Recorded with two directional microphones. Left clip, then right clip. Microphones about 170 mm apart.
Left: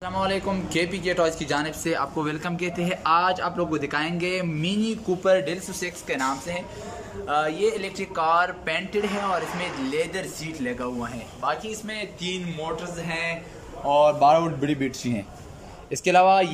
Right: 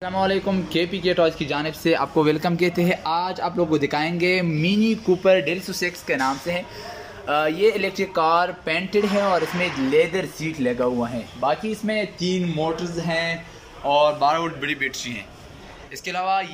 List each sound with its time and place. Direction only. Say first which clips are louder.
0.0 s a man's voice: right 4 dB; 15° right (ahead or behind)
13.8 s speech: right 1 dB; 5° left (ahead or behind)
14.2 s speech: left 2 dB; 20° left (ahead or behind)
14.6 s speech: right 2 dB; 40° left (ahead or behind)
14.9 s speech: right 1 dB; 55° left (ahead or behind)
15.9 s speech: left 6 dB; 70° left (ahead or behind)